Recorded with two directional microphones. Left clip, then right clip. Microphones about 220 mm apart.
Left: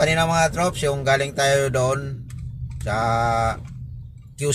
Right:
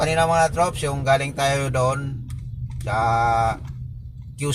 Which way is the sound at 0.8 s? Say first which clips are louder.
Even; 20° left (ahead or behind).